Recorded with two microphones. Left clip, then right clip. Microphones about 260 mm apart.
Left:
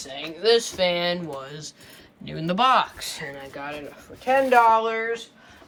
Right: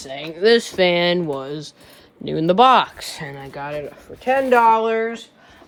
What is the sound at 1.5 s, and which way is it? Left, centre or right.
Speech, centre.